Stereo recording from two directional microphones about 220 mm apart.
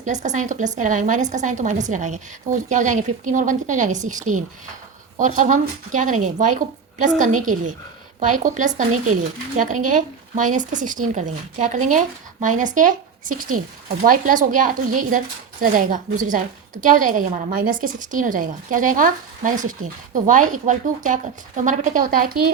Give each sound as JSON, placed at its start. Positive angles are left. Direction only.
{"t": 0.0, "sound": "speech", "side_deg": -35}
{"t": 7.2, "sound": "speech", "side_deg": -35}